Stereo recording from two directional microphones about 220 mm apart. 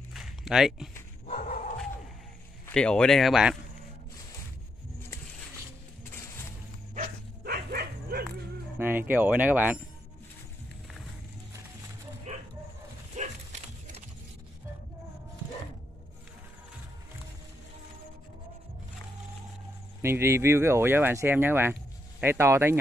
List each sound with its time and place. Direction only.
0.1 s a sound: centre (ahead or behind)
1.2 s dog: 35° left (ahead or behind)
2.6 s speech: 5° left (ahead or behind)
7.4 s bow-wow: 45° right (ahead or behind)
8.7 s speech: 10° right (ahead or behind)
12.3 s bow-wow: 30° right (ahead or behind)
13.1 s dog: 35° right (ahead or behind)
20.0 s speech: 10° right (ahead or behind)